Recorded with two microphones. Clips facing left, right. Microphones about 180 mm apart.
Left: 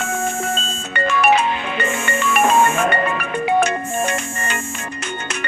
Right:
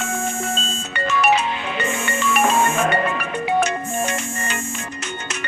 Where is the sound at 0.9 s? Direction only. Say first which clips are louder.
Left 3 dB; 55° left (ahead or behind).